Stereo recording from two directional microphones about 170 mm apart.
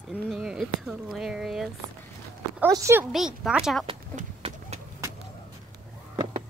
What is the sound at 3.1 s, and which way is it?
Speech, 5° right (ahead or behind).